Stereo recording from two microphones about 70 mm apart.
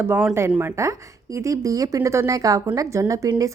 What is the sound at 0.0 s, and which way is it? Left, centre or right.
Speech, right.